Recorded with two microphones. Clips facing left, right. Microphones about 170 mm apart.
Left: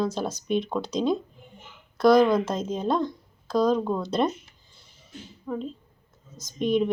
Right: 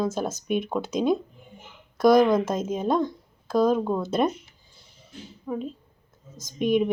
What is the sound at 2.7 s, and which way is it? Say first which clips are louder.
Speech: right 1 dB; 10° right (ahead or behind).